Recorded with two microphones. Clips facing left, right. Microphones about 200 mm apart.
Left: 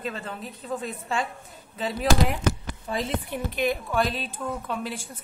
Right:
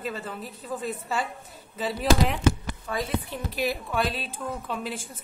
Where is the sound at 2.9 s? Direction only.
25° left (ahead or behind).